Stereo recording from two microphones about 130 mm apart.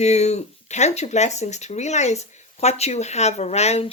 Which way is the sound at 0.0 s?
60° left (ahead or behind).